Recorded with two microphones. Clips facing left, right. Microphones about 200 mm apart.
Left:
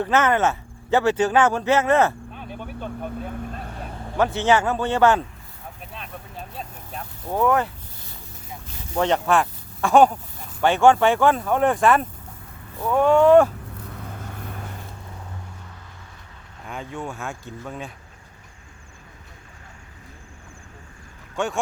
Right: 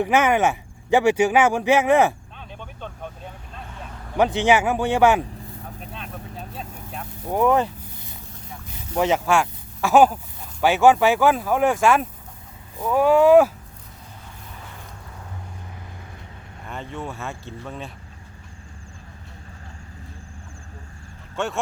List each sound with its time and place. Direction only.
0.0 s speech: 15° right (ahead or behind)
2.3 s a sound: 10° left (ahead or behind)
3.2 s speech: 55° left (ahead or behind)
4.2 s speech: 15° right (ahead or behind)
5.8 s vehicle: centre (ahead or behind)
7.3 s speech: 15° right (ahead or behind)
9.0 s speech: 5° right (ahead or behind)
13.8 s vehicle: 60° left (ahead or behind)
16.6 s speech: centre (ahead or behind)
21.3 s speech: centre (ahead or behind)